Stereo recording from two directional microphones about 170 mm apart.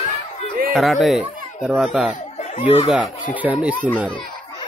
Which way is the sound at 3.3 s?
10° right (ahead or behind).